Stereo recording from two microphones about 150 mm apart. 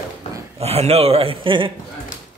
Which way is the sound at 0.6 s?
45° right (ahead or behind).